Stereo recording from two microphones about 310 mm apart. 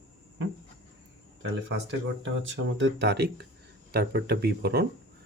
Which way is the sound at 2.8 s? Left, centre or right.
Right.